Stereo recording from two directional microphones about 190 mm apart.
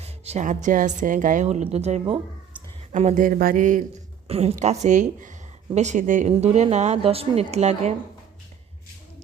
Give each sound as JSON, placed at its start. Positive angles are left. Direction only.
{"t": 0.0, "sound": "a woman's voice", "side_deg": -35}
{"t": 4.3, "sound": "a woman's voice", "side_deg": -35}